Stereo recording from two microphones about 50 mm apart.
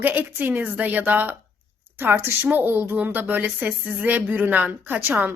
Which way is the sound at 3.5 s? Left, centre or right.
Right.